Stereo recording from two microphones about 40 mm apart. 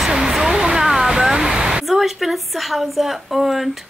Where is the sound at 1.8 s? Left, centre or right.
Centre.